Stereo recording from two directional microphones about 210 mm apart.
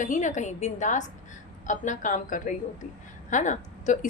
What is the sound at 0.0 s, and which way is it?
A woman's voice, 35° left (ahead or behind).